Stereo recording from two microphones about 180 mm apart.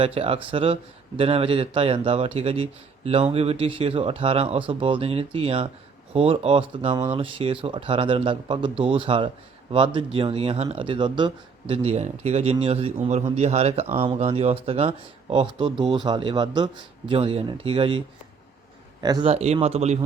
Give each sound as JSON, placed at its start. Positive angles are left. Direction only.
{"t": 0.0, "sound": "speech", "side_deg": -30}
{"t": 19.0, "sound": "speech", "side_deg": -20}
{"t": 19.3, "sound": "speech", "side_deg": -35}